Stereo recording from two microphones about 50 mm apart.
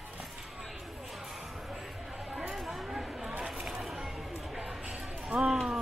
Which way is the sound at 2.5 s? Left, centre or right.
Centre.